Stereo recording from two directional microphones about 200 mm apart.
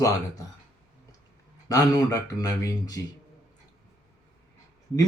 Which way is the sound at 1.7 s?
15° left (ahead or behind).